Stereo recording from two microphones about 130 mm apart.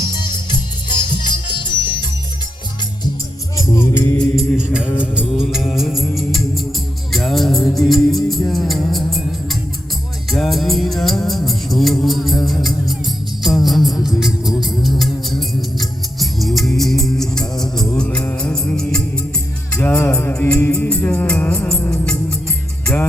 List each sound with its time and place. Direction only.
0.0 s music: 35° left (ahead or behind)
3.6 s music: 20° left (ahead or behind)
4.4 s music: centre (ahead or behind)
10.3 s music: centre (ahead or behind)
13.4 s music: centre (ahead or behind)